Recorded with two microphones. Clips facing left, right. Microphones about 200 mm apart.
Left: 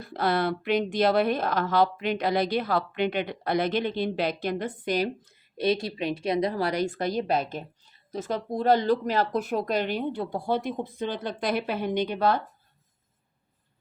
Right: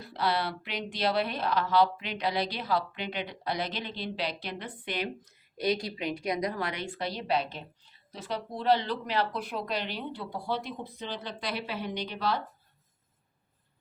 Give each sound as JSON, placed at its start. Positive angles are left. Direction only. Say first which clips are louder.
{"t": 0.0, "sound": "speech", "louder": "left 5 dB", "side_deg": 50}
{"t": 5.5, "sound": "speech", "louder": "left 4 dB", "side_deg": 25}